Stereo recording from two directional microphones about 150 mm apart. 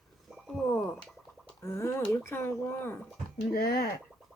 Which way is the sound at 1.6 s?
20° left (ahead or behind).